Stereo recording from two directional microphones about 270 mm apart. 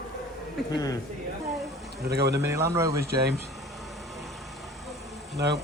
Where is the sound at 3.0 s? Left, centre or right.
Right.